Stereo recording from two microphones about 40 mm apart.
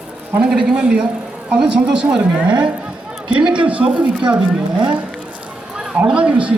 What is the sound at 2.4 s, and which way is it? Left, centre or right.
Speech, right.